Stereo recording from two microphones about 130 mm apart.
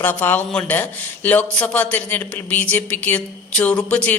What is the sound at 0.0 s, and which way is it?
Speech, 15° left (ahead or behind).